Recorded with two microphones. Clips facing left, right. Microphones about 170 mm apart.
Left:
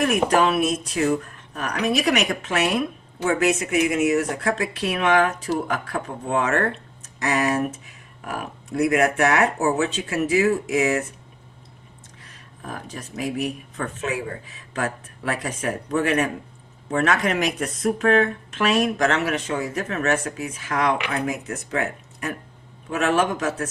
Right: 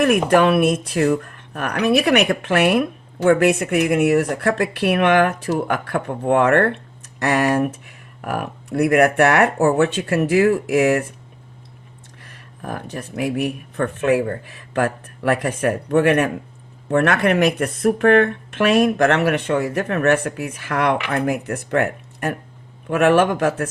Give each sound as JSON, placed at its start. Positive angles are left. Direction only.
{"t": 0.0, "sound": "speech", "side_deg": -55}
{"t": 12.2, "sound": "speech", "side_deg": -60}